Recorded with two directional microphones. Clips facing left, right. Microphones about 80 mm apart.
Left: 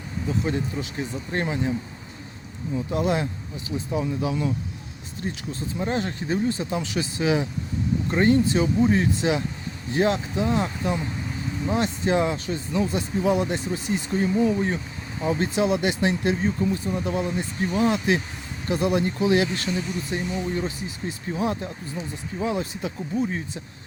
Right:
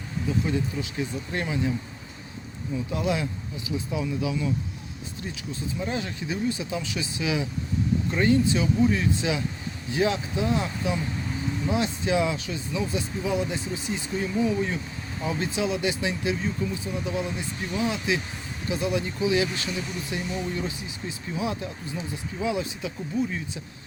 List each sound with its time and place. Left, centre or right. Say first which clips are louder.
0.3 s speech: left 1 dB; left
2.9 s speech: left 3 dB; left
15.5 s speech: left 3 dB; left